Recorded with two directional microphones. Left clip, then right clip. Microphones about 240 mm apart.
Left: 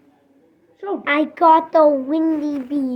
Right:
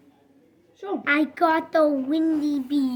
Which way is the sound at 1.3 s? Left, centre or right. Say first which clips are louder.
Left 8 dB; centre.